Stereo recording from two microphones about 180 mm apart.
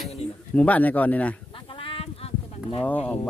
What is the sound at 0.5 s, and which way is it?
Speech, 10° left (ahead or behind).